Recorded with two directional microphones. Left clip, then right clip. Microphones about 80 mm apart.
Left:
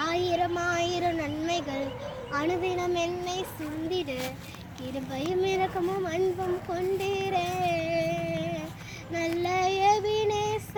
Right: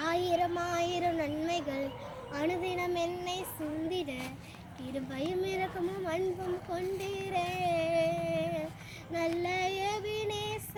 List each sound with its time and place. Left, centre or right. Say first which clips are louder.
0.0 s a sound: left 3 dB; right
2.3 s a child's voice: left 5 dB; right
6.7 s female singing: left 7 dB; right
9.4 s child singing: left 7 dB; right